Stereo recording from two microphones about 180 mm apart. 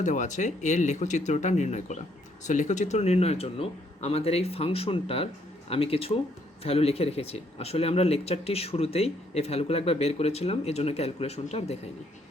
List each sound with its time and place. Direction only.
0.0 s speech: 45° left (ahead or behind)